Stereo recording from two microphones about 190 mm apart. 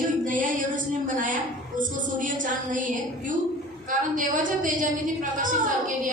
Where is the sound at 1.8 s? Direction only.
45° right (ahead or behind).